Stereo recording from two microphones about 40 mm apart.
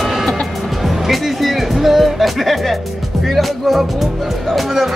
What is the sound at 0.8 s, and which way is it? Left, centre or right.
Speech, centre.